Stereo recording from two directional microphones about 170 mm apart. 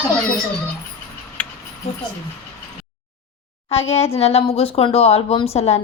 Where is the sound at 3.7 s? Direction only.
35° left (ahead or behind).